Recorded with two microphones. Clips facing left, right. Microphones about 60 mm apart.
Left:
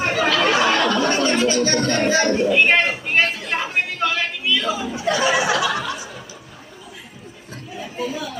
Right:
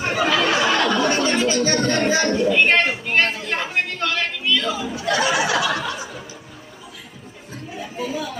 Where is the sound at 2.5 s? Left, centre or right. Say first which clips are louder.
Even; centre.